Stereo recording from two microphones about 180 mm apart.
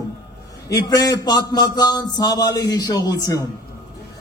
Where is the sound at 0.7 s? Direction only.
20° left (ahead or behind).